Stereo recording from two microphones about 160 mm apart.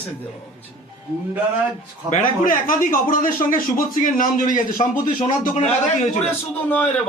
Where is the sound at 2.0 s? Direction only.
50° left (ahead or behind).